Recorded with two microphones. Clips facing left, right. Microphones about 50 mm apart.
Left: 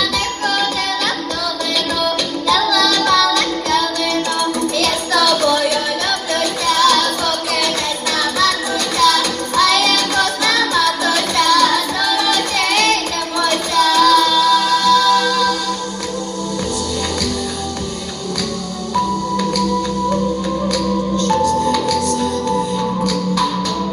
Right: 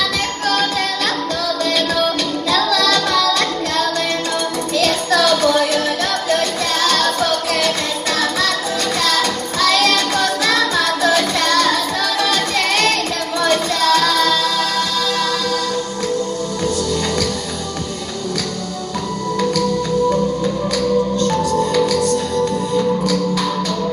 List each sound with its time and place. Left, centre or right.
2.5 s music: right
5.1 s music: right
9.6 s music: right
13.4 s child singing: right